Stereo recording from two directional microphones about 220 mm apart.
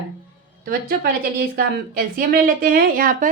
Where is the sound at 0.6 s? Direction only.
40° right (ahead or behind).